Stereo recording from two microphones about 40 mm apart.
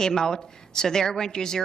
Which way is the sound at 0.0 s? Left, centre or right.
Centre.